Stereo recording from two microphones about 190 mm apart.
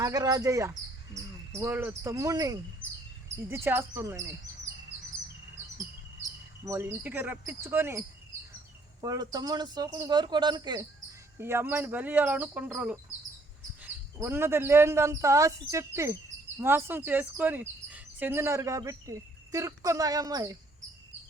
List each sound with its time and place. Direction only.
0.0 s speech: 20° right (ahead or behind)
6.7 s speech: 15° right (ahead or behind)